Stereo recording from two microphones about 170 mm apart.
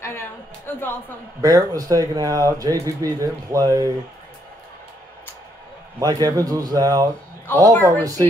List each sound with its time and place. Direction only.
0.0 s speech: 15° left (ahead or behind)
1.4 s speech: 20° right (ahead or behind)
5.9 s speech: 20° right (ahead or behind)
7.5 s speech: 10° left (ahead or behind)
8.0 s speech: 20° right (ahead or behind)